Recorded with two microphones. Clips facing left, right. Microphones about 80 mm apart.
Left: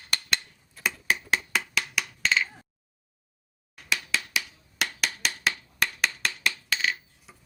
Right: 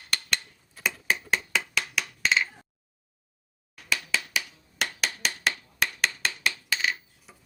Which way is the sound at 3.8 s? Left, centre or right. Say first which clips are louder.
Even; centre.